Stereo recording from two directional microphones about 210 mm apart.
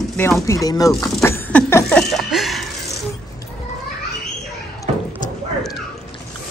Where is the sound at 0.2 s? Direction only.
10° left (ahead or behind).